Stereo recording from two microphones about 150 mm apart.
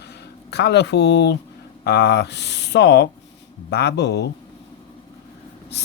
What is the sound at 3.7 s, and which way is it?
Mantra, 90° left.